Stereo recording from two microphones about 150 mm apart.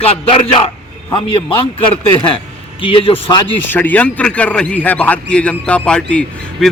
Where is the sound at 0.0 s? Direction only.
40° left (ahead or behind).